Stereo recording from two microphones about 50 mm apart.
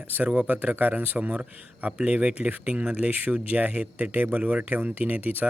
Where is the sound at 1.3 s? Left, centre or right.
Right.